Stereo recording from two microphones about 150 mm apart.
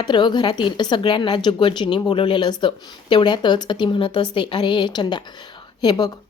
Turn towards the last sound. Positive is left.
turn(degrees=25)  # may be behind; listen again after turning